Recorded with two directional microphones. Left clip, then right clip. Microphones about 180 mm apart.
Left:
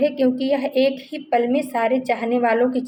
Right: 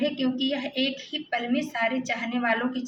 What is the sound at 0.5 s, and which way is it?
A woman's voice, 50° left (ahead or behind).